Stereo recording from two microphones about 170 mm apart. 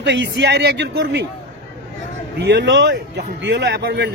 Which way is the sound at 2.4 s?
90° right.